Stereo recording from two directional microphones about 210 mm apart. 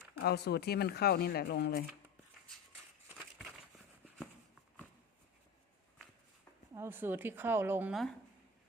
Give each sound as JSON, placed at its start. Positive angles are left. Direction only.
{"t": 0.2, "sound": "speech", "side_deg": 50}
{"t": 3.2, "sound": "a sound", "side_deg": 0}
{"t": 6.7, "sound": "a woman's voice", "side_deg": -10}